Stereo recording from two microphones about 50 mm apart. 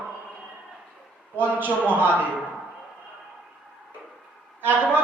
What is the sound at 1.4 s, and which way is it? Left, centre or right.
Speech, right.